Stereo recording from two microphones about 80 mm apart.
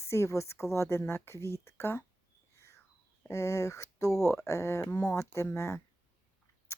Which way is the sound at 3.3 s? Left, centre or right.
Left.